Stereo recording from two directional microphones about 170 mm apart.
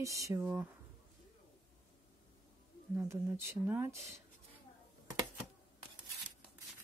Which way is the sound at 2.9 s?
15° right (ahead or behind).